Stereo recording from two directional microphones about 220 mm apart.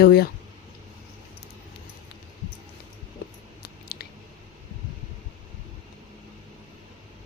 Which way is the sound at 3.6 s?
45° left (ahead or behind).